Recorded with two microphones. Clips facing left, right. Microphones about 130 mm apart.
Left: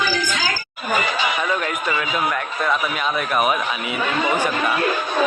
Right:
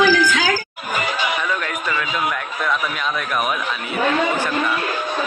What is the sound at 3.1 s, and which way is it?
Speech, 5° left (ahead or behind).